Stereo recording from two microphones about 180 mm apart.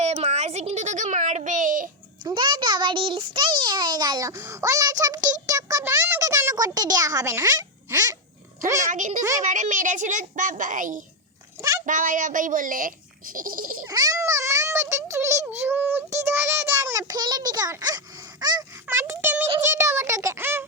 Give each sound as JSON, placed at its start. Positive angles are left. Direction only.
{"t": 0.0, "sound": "a sound", "side_deg": -40}
{"t": 2.2, "sound": "a child's voice", "side_deg": -25}
{"t": 8.9, "sound": "speech", "side_deg": -45}
{"t": 13.8, "sound": "a child's voice", "side_deg": -20}